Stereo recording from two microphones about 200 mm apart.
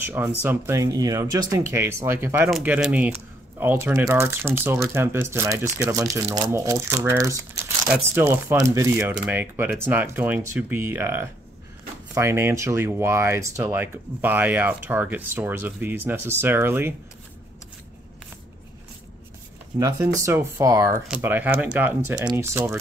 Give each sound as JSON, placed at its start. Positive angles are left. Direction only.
{"t": 0.1, "sound": "speech", "side_deg": -10}
{"t": 19.8, "sound": "speech", "side_deg": -15}